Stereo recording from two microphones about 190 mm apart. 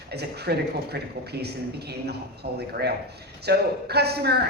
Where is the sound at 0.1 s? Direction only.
60° right (ahead or behind).